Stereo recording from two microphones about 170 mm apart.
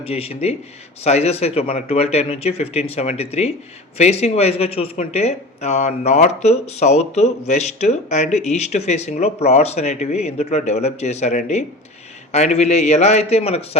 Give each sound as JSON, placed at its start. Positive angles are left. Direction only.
{"t": 0.0, "sound": "speech", "side_deg": 35}